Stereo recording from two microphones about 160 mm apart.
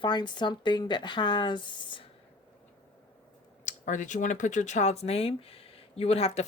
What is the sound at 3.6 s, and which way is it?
Speech, 50° left (ahead or behind).